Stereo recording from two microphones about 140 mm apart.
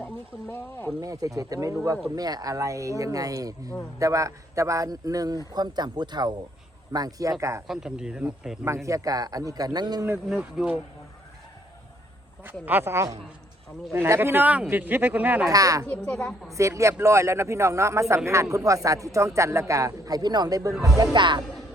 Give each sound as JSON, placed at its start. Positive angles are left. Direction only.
{"t": 0.0, "sound": "speech", "side_deg": 15}
{"t": 1.0, "sound": "speech", "side_deg": -25}
{"t": 7.7, "sound": "speech", "side_deg": -5}
{"t": 8.6, "sound": "speech", "side_deg": -20}
{"t": 10.2, "sound": "speech", "side_deg": -5}
{"t": 12.4, "sound": "speech", "side_deg": -15}
{"t": 15.4, "sound": "speech", "side_deg": -25}
{"t": 16.0, "sound": "speech", "side_deg": 5}
{"t": 16.5, "sound": "speech", "side_deg": -20}